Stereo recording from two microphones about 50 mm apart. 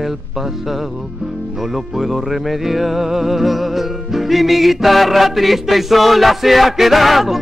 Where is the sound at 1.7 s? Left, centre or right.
Centre.